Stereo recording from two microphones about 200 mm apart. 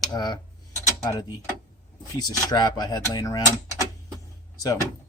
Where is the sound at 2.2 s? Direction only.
20° left (ahead or behind).